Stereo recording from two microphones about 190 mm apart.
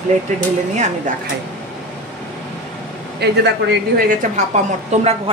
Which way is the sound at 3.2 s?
60° right (ahead or behind).